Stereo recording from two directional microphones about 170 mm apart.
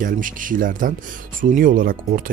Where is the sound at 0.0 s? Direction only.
50° right (ahead or behind).